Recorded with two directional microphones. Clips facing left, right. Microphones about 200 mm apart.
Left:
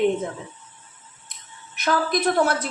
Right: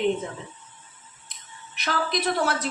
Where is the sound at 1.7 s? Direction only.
50° left (ahead or behind).